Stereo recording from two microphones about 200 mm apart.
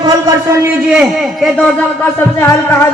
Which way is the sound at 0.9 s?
Centre (ahead or behind).